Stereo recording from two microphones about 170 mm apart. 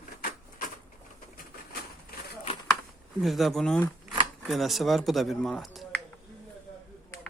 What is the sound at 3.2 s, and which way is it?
Speech, centre (ahead or behind).